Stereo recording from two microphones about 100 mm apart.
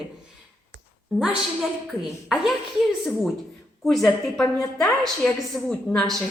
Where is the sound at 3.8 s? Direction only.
5° left (ahead or behind).